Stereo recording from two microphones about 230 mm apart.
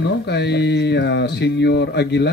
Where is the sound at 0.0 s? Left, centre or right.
Left.